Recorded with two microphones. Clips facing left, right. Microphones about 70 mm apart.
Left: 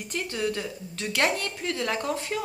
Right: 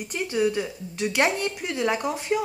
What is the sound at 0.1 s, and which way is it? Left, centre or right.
A woman's voice, centre.